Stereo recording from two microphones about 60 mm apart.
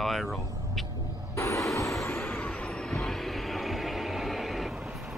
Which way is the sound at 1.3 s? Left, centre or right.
Left.